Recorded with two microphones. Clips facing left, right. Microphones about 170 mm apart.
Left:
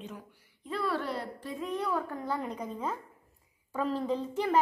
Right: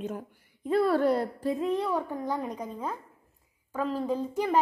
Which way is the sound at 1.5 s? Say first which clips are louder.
Right 4 dB; 35° right (ahead or behind).